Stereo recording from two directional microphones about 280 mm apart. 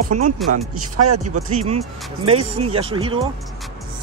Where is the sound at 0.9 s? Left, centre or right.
Right.